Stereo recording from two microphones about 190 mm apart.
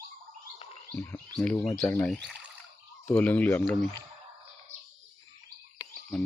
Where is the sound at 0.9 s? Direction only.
10° left (ahead or behind).